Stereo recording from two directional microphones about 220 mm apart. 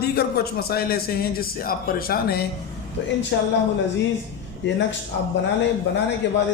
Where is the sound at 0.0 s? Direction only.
45° left (ahead or behind).